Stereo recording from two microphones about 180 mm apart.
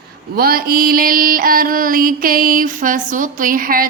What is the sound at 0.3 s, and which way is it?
Mantra, 55° right (ahead or behind).